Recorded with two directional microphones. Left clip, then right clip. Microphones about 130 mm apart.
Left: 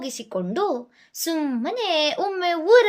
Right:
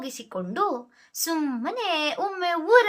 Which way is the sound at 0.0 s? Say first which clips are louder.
Left 4 dB; 30° left (ahead or behind).